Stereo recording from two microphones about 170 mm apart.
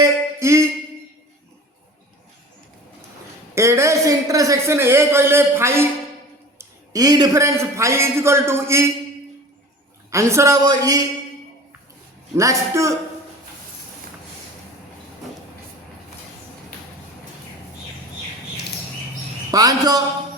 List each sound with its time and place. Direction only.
0.0 s a sound: 15° right (ahead or behind)
3.5 s speech: 15° right (ahead or behind)
10.1 s speech: 15° right (ahead or behind)
12.4 s speech: 20° right (ahead or behind)
19.5 s a man's voice: 20° right (ahead or behind)